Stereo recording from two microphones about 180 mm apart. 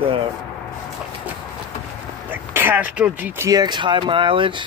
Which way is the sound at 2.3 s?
10° right (ahead or behind).